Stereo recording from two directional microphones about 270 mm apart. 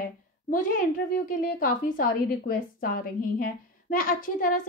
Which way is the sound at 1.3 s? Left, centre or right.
Left.